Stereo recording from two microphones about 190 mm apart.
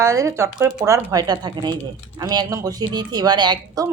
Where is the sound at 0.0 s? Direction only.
15° right (ahead or behind).